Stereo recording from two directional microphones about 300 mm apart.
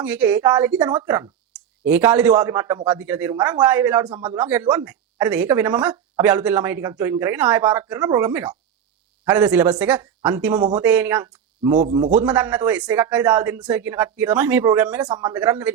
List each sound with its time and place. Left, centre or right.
0.0 s a woman's voice: centre
4.4 s speech: centre
11.8 s a man's voice: centre
12.1 s a woman's voice: centre